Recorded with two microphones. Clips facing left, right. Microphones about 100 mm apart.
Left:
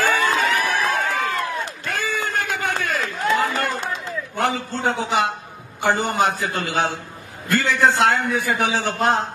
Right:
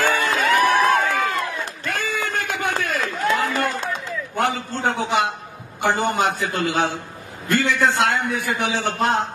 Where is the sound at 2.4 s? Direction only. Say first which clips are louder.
Even; 35° right (ahead or behind).